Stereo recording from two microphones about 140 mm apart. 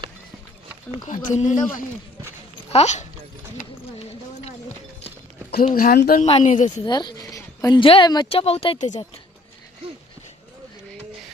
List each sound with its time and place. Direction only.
1.0 s speech: 65° left (ahead or behind)
2.6 s speech: 50° left (ahead or behind)
5.5 s speech: 90° left
6.4 s speech: 60° left (ahead or behind)
6.8 s speech: 30° left (ahead or behind)
7.3 s a sound: 25° left (ahead or behind)
7.8 s speech: 40° left (ahead or behind)